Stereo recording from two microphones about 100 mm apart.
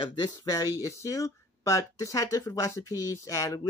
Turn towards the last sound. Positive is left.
turn(degrees=35)  # may be behind; listen again after turning